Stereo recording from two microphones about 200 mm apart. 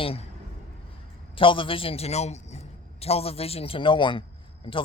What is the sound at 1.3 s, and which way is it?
A man's voice, 25° left (ahead or behind).